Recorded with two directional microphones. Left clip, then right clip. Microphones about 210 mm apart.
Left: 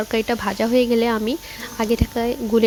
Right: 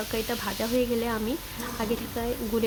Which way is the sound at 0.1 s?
40° left (ahead or behind).